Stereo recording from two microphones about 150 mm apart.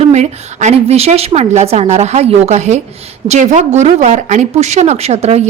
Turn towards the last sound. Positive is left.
turn(degrees=-45)  # may be behind; listen again after turning